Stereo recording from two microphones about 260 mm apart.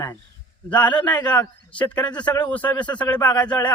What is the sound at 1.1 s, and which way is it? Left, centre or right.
Speech, centre.